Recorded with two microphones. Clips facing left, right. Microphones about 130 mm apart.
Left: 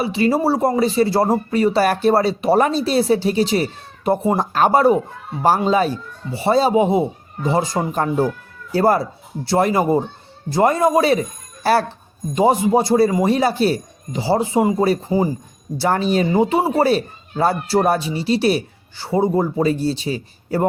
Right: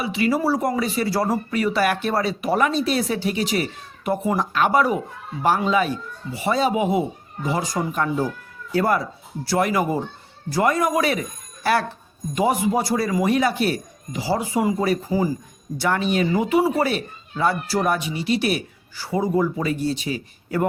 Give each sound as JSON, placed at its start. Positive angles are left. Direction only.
{"t": 0.0, "sound": "speech", "side_deg": 30}
{"t": 15.8, "sound": "speech", "side_deg": 35}